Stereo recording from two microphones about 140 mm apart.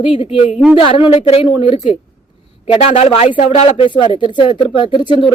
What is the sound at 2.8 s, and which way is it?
Speech, 50° left (ahead or behind).